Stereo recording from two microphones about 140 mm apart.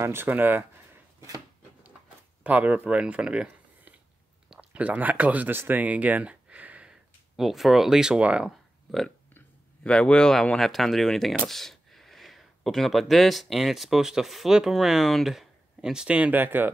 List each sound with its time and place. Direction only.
0.0 s speech: 15° right (ahead or behind)
2.4 s speech: 10° right (ahead or behind)